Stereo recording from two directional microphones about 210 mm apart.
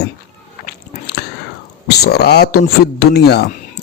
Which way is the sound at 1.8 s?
50° left (ahead or behind).